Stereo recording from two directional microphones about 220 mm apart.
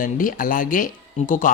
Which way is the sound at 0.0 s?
40° left (ahead or behind).